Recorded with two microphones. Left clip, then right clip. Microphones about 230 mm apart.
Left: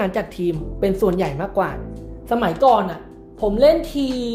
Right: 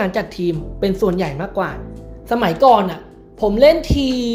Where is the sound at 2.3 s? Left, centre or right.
Centre.